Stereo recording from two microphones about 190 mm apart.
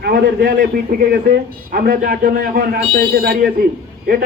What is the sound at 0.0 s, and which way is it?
A man's voice, 50° right (ahead or behind).